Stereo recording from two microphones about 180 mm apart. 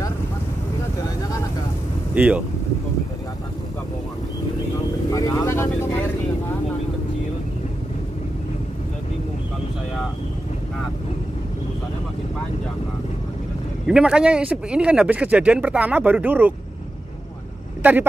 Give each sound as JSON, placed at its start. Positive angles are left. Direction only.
{"t": 2.1, "sound": "speech", "side_deg": -5}
{"t": 5.1, "sound": "vehicle", "side_deg": 20}
{"t": 13.8, "sound": "speech", "side_deg": -5}